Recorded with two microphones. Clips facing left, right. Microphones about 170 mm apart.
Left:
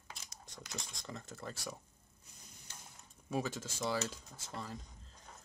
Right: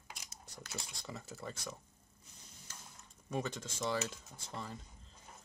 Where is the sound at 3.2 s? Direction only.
5° left (ahead or behind).